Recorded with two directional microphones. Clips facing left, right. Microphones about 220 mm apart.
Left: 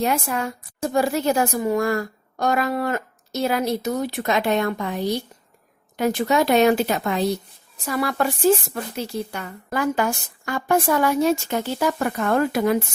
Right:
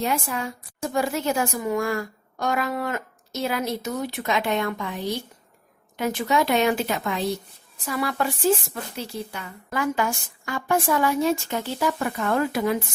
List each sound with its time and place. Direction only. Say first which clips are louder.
0.0 s a woman's voice: left 3 dB; 55° left (ahead or behind)
0.8 s a woman's voice: left 4 dB; 35° left (ahead or behind)
6.0 s a woman's voice: left 3 dB; 40° left (ahead or behind)
9.3 s a woman's voice: left 3 dB; 45° left (ahead or behind)